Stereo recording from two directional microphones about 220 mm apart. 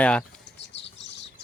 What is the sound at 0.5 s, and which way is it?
Chirp, 55° left (ahead or behind).